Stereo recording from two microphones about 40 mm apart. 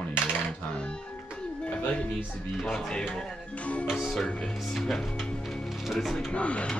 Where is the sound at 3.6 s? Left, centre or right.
Left.